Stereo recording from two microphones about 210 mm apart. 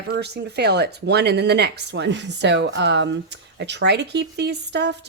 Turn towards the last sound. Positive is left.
turn(degrees=-55)  # may be behind; listen again after turning